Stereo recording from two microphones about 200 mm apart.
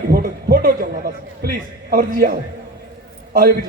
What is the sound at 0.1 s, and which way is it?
A man's voice, 50° right (ahead or behind).